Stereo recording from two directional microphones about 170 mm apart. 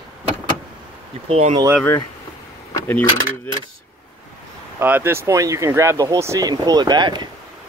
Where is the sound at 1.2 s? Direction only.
40° right (ahead or behind).